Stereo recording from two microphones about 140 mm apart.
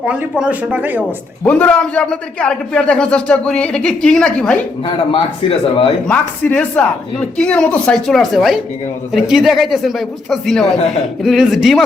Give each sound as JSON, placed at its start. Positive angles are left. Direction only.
{"t": 0.0, "sound": "speech", "side_deg": -5}
{"t": 1.5, "sound": "a man's voice", "side_deg": 10}
{"t": 5.1, "sound": "speech", "side_deg": 40}
{"t": 6.1, "sound": "speech", "side_deg": 10}